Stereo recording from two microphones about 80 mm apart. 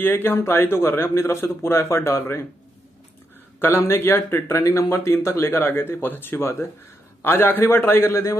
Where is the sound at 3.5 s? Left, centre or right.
Left.